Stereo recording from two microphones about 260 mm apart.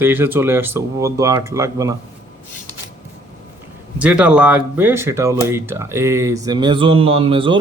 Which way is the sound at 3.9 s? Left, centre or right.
Centre.